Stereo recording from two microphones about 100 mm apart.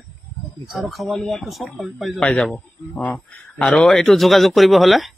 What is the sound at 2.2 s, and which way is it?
A man's voice, 10° left (ahead or behind).